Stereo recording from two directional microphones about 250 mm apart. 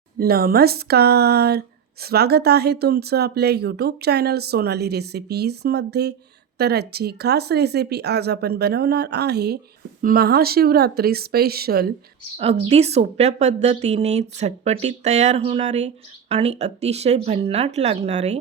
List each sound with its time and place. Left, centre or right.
0.2 s speech: right
12.4 s a woman's voice: right